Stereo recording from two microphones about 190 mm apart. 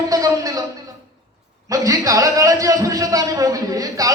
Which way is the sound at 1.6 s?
15° right (ahead or behind).